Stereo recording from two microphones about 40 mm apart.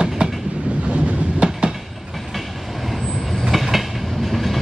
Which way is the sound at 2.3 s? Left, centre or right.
Centre.